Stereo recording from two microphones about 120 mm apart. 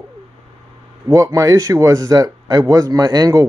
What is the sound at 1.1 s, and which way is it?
Speech, 25° right (ahead or behind).